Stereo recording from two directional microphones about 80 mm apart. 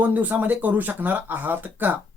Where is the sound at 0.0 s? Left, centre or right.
Right.